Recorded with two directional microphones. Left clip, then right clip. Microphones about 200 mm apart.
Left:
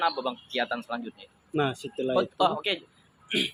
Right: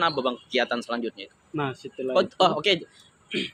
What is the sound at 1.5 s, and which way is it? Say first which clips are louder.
Speech: left 2 dB; 40° left (ahead or behind).